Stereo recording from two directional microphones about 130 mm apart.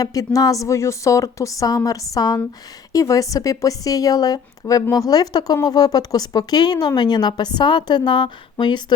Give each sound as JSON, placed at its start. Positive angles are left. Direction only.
{"t": 0.0, "sound": "a woman's voice", "side_deg": 25}